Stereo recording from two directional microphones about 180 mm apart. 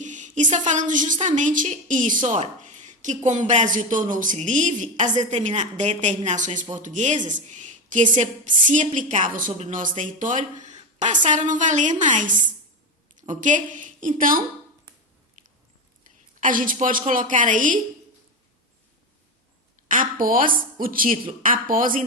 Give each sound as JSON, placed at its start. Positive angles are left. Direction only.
{"t": 0.0, "sound": "a woman's voice", "side_deg": -45}
{"t": 7.3, "sound": "a sound", "side_deg": -45}
{"t": 8.2, "sound": "a woman's voice", "side_deg": -45}
{"t": 15.4, "sound": "a sound", "side_deg": -45}
{"t": 16.4, "sound": "a woman's voice", "side_deg": -50}
{"t": 19.9, "sound": "a woman's voice", "side_deg": -50}